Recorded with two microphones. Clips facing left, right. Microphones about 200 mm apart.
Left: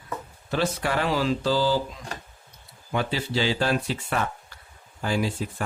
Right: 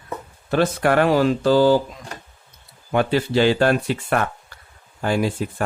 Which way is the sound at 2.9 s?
60° right (ahead or behind).